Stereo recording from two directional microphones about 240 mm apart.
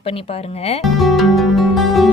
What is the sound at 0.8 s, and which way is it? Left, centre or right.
Music, centre.